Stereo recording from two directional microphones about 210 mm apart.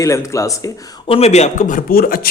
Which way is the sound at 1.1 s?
30° left (ahead or behind).